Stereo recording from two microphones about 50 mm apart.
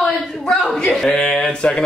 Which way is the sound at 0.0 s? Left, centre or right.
Centre.